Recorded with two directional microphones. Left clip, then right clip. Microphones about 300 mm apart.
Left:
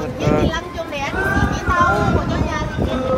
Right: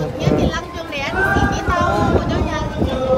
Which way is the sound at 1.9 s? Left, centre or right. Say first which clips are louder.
Even; right.